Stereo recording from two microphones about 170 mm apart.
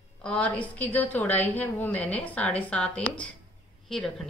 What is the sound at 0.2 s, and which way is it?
A woman's voice, 5° left (ahead or behind).